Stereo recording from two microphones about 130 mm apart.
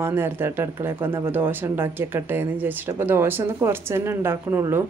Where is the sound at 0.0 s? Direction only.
20° right (ahead or behind).